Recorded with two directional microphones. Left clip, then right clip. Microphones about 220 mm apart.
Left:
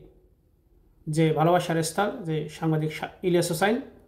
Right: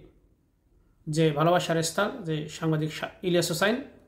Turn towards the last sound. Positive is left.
turn(degrees=-15)  # may be behind; listen again after turning